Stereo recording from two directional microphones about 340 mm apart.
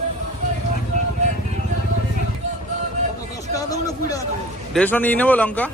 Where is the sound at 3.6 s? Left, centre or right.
Centre.